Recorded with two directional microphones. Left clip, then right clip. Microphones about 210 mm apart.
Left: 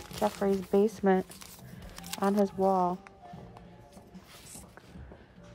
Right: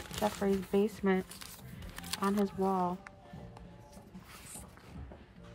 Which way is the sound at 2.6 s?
15° left (ahead or behind).